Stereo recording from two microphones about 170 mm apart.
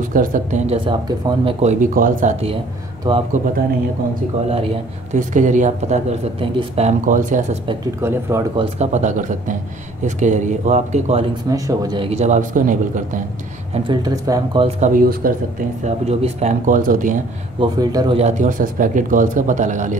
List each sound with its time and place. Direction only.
0.1 s speech: 50° right (ahead or behind)
0.7 s speech: 30° right (ahead or behind); by 2.3 s 50° right (ahead or behind)
3.1 s speech: 30° right (ahead or behind)
4.5 s speech: 35° right (ahead or behind)
8.0 s speech: 15° right (ahead or behind)
8.7 s speech: 45° right (ahead or behind)
11.5 s speech: 20° right (ahead or behind)
12.0 s speech: 40° right (ahead or behind)
13.8 s speech: 20° right (ahead or behind)
14.8 s speech: 50° right (ahead or behind)
15.8 s speech: 40° right (ahead or behind)
17.6 s speech: 25° right (ahead or behind)
18.1 s speech: 45° right (ahead or behind)